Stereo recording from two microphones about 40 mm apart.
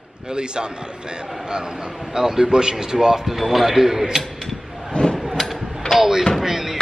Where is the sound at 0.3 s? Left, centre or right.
Right.